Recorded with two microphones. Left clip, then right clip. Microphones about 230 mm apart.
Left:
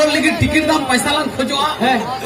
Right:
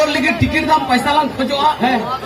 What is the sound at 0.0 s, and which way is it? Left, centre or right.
A man's voice, left.